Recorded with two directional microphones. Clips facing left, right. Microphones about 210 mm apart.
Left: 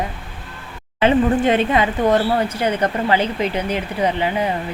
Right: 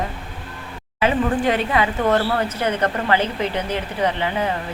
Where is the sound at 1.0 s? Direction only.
25° left (ahead or behind).